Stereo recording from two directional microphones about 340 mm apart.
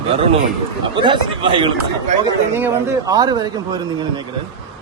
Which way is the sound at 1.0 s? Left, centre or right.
Centre.